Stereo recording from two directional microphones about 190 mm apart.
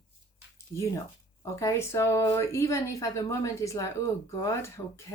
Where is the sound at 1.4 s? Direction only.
15° left (ahead or behind).